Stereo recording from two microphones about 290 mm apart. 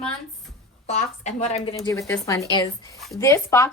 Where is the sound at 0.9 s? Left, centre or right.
Left.